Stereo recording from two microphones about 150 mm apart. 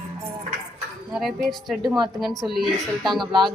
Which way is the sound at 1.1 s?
Centre (ahead or behind).